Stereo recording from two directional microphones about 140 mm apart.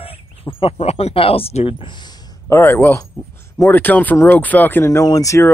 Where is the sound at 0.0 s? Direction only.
40° left (ahead or behind).